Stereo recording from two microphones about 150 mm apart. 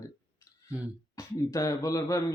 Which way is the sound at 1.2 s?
20° left (ahead or behind).